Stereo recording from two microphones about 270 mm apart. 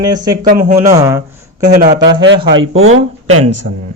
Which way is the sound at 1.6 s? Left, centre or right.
Right.